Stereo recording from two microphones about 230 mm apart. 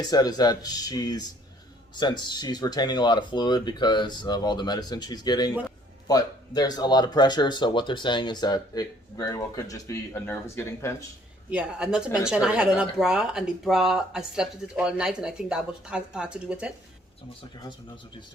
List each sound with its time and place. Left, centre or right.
0.0 s speech: centre
11.5 s speech: centre